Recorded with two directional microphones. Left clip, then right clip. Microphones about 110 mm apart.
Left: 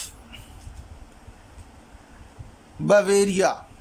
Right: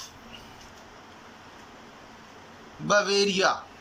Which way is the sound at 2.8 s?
90° left.